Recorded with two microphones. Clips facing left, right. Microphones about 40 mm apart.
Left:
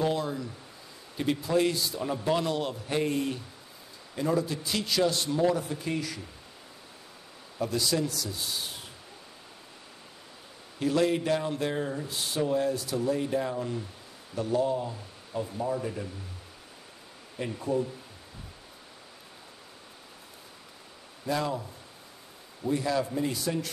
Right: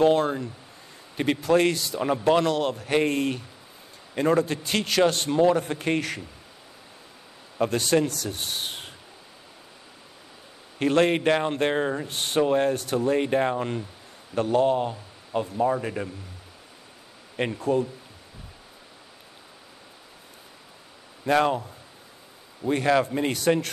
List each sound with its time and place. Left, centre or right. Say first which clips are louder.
0.0 s speech: right 8 dB; right
7.5 s speech: right 6 dB; right
10.8 s a man's voice: right 5 dB; right
17.6 s speech: right 4 dB; right
21.3 s speech: right 8 dB; right
22.7 s a man's voice: right 6 dB; right